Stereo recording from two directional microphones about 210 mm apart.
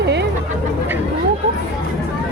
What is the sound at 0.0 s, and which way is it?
Chatter, 55° right (ahead or behind).